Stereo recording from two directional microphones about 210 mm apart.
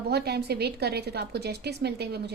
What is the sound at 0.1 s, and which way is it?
A woman's voice, 50° right (ahead or behind).